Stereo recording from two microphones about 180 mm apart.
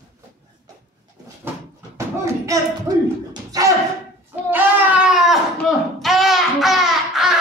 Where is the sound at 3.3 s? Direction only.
20° right (ahead or behind).